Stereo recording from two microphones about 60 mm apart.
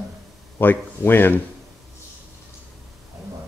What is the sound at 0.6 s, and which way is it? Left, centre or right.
Speech, left.